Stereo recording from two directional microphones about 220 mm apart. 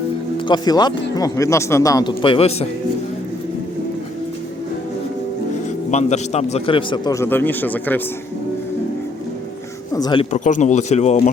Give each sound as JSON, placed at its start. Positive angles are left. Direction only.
{"t": 0.4, "sound": "speech", "side_deg": 20}
{"t": 5.9, "sound": "speech", "side_deg": 30}
{"t": 9.9, "sound": "speech", "side_deg": 20}
{"t": 10.3, "sound": "speech", "side_deg": 35}